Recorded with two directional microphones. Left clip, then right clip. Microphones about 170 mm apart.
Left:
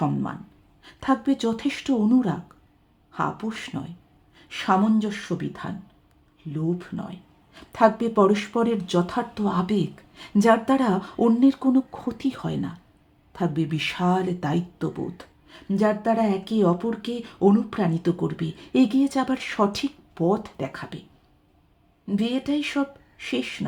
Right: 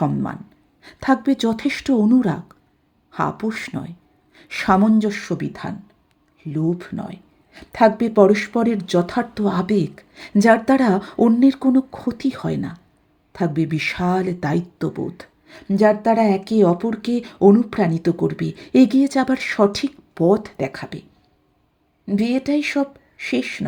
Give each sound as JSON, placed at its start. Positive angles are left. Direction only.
{"t": 0.0, "sound": "speech", "side_deg": -20}
{"t": 4.4, "sound": "a sound", "side_deg": -25}
{"t": 4.9, "sound": "speech", "side_deg": -25}
{"t": 22.0, "sound": "speech", "side_deg": -20}